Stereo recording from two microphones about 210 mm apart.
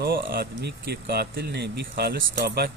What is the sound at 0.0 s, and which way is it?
Speech, 45° right (ahead or behind).